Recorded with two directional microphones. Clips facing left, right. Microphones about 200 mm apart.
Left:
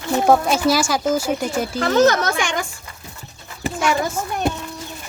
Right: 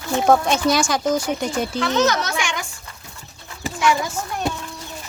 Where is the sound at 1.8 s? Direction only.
50° left (ahead or behind).